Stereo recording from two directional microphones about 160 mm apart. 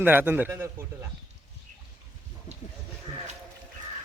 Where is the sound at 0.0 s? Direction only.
10° right (ahead or behind).